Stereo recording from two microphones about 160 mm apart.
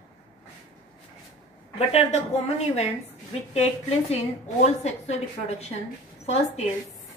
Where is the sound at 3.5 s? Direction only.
40° left (ahead or behind).